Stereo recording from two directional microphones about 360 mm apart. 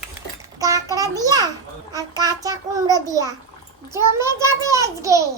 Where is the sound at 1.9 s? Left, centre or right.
Centre.